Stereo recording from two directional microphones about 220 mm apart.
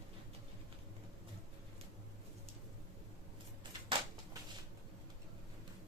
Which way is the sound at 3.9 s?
20° right (ahead or behind).